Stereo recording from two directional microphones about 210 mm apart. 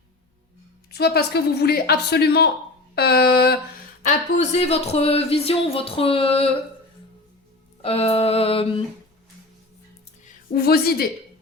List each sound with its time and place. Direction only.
0.9 s a woman's voice: 50° left (ahead or behind)
4.0 s speech: 35° left (ahead or behind)
7.8 s speech: 30° left (ahead or behind)
10.2 s a woman's voice: 45° left (ahead or behind)